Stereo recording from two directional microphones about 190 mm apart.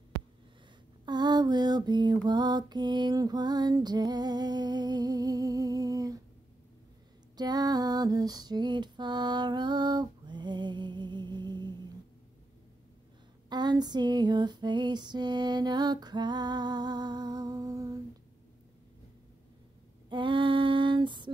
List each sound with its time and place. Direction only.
1.0 s lullaby: 20° right (ahead or behind)
7.3 s lullaby: 20° right (ahead or behind)
13.5 s female singing: 20° right (ahead or behind)
20.1 s female singing: 25° right (ahead or behind)